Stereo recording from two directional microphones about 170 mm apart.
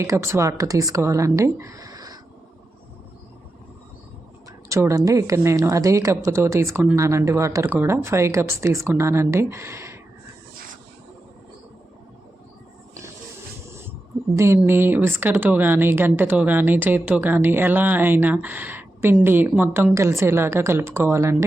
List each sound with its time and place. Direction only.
0.0 s speech: 15° right (ahead or behind)
4.7 s speech: 15° right (ahead or behind)
13.7 s a sound: 15° right (ahead or behind)
14.3 s speech: 15° right (ahead or behind)